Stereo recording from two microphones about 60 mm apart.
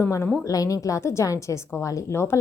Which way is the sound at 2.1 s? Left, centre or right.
Left.